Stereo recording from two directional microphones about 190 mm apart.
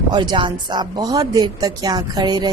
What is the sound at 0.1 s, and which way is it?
Speech, 25° right (ahead or behind).